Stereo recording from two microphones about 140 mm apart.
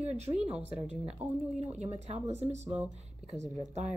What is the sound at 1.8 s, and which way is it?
A woman's voice, 55° right (ahead or behind).